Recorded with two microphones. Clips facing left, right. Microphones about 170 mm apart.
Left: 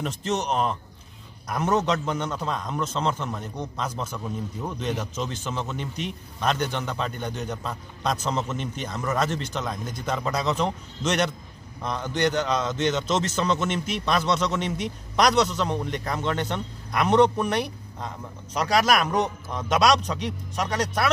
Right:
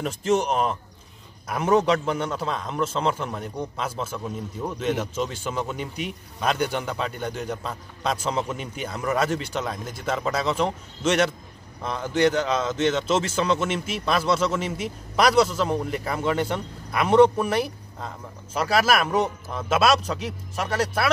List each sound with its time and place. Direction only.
0.0 s a man's voice: 10° right (ahead or behind)